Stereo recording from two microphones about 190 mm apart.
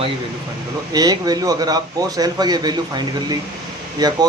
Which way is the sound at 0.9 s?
20° right (ahead or behind).